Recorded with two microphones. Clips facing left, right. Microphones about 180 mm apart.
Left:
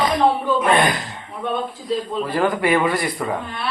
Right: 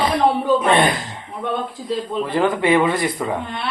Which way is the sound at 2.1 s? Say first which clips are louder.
Right 3 dB; 20° right (ahead or behind).